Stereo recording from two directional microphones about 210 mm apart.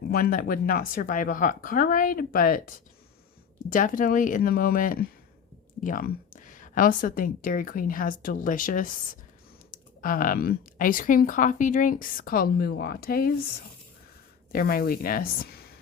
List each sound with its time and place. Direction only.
0.1 s a woman's voice: 45° left (ahead or behind)
14.5 s speech: 45° left (ahead or behind)